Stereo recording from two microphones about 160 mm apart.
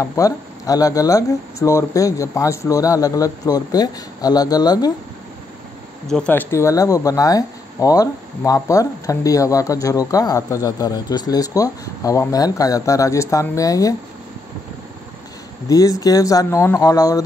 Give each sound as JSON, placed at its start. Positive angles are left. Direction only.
{"t": 0.0, "sound": "speech", "side_deg": 20}
{"t": 6.0, "sound": "speech", "side_deg": 5}
{"t": 15.7, "sound": "speech", "side_deg": 20}